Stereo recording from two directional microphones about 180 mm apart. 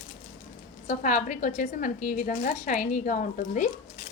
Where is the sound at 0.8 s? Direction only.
40° left (ahead or behind).